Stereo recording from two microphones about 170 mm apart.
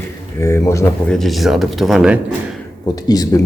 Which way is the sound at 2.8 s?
20° left (ahead or behind).